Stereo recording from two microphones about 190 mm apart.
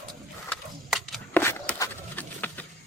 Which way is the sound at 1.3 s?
10° left (ahead or behind).